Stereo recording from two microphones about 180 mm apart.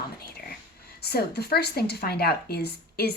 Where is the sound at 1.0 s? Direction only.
65° left (ahead or behind).